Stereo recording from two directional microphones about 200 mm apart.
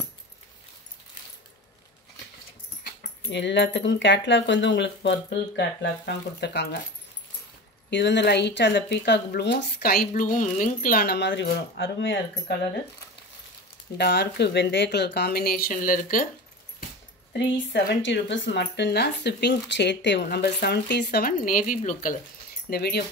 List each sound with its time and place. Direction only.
3.3 s speech: 60° left (ahead or behind)
7.9 s speech: 60° left (ahead or behind)
13.9 s speech: 55° left (ahead or behind)
17.3 s speech: 55° left (ahead or behind); by 22.1 s 40° left (ahead or behind)
22.7 s speech: 50° left (ahead or behind)